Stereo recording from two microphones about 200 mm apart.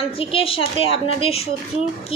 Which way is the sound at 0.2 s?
25° left (ahead or behind).